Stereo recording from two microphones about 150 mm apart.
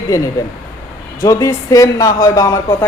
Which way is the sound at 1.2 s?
20° left (ahead or behind).